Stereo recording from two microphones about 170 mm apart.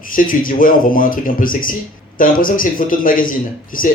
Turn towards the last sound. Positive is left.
turn(degrees=55)  # may be behind; listen again after turning